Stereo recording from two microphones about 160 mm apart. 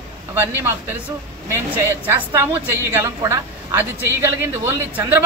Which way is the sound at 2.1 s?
15° right (ahead or behind).